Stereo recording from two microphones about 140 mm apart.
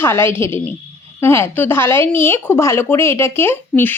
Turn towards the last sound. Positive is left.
turn(degrees=15)  # may be behind; listen again after turning